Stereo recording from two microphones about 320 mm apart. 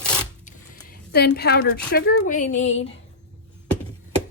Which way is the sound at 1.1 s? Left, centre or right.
Left.